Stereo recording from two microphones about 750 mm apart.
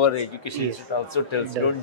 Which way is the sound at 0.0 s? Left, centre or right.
Left.